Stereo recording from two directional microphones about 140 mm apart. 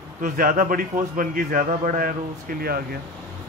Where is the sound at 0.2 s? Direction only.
85° right.